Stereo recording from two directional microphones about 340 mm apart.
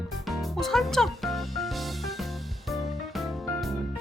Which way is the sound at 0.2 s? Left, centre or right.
Centre.